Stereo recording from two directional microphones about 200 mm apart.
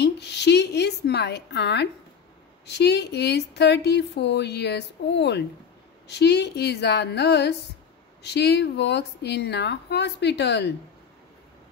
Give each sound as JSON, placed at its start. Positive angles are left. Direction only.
{"t": 0.0, "sound": "a woman's voice", "side_deg": 55}